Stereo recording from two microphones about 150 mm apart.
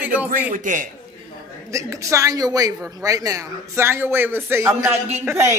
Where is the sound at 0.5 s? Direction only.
60° right (ahead or behind).